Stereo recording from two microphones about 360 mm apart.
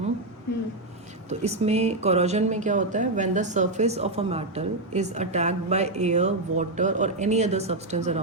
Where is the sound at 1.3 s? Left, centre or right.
Centre.